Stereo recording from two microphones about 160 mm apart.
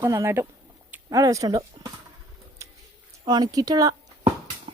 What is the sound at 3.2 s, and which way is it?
Speech, 25° right (ahead or behind).